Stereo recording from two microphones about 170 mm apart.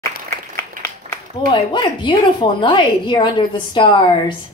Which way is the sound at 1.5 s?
25° left (ahead or behind).